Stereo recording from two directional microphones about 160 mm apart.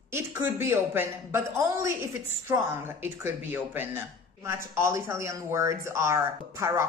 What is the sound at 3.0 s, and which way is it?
Speech, 15° right (ahead or behind).